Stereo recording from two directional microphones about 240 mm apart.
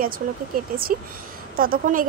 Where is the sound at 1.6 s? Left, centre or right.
Right.